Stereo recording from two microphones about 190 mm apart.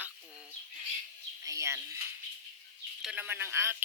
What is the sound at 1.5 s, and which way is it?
Speech, 15° right (ahead or behind).